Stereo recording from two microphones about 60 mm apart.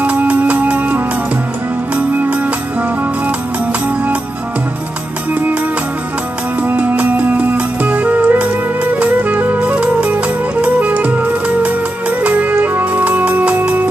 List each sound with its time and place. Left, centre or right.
0.0 s music: right
6.6 s music: right